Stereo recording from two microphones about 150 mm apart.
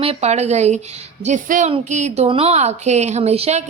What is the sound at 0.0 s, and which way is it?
A woman's voice, 45° right (ahead or behind).